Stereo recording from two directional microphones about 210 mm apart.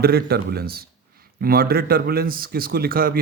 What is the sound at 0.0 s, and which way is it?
Speech, 50° right (ahead or behind).